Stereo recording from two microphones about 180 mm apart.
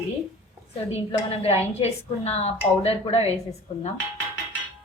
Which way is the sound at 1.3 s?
35° left (ahead or behind).